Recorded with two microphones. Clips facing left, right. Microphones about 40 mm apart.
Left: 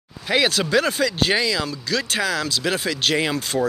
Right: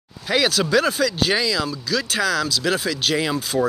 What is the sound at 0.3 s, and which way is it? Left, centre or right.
Speech, left.